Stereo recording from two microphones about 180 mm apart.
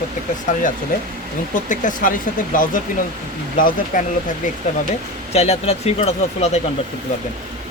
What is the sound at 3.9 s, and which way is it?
Speech, 45° left (ahead or behind).